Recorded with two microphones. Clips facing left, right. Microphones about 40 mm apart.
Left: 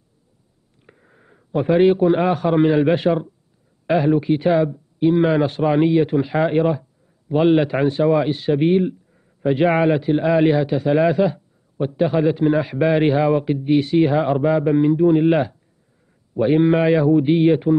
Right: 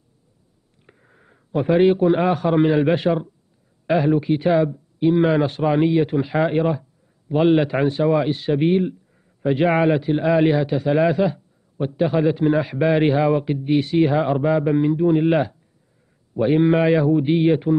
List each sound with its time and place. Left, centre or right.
0.8 s a man's voice: centre